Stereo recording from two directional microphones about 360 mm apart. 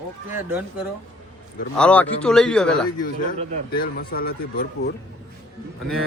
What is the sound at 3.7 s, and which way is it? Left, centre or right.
Speech, left.